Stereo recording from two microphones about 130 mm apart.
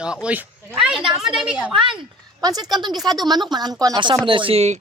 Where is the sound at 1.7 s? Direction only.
40° right (ahead or behind).